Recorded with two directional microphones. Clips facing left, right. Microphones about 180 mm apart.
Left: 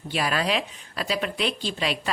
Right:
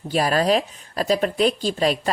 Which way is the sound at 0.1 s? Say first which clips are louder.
Right 6 dB; 40° right (ahead or behind).